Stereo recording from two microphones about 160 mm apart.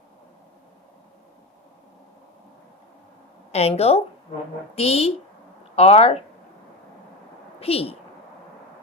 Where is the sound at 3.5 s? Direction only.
40° left (ahead or behind).